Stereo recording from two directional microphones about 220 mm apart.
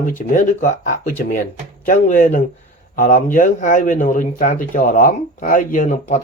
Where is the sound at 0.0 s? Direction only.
35° left (ahead or behind).